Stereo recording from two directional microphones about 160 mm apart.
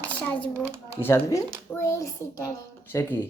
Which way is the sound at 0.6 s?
15° right (ahead or behind).